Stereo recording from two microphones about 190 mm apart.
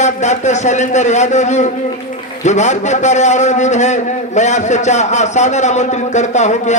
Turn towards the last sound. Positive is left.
turn(degrees=40)  # may be behind; listen again after turning